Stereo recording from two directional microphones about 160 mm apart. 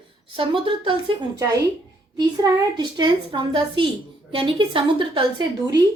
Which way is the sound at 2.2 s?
25° right (ahead or behind).